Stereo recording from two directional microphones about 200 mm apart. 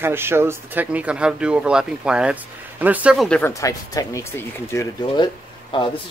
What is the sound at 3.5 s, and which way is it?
Speech, 15° left (ahead or behind).